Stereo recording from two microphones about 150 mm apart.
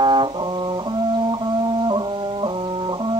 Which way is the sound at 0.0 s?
30° right (ahead or behind).